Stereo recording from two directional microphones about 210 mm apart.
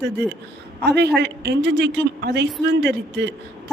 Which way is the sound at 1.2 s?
55° right (ahead or behind).